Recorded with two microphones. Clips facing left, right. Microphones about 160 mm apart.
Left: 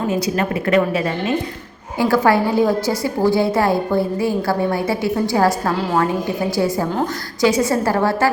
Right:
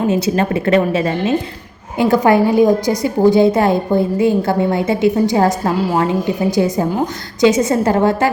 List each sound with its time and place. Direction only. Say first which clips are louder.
0.1 s a woman's voice: right 4 dB; 25° right (ahead or behind)